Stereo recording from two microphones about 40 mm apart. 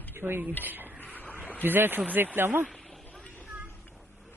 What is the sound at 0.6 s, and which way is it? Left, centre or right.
Speech, right.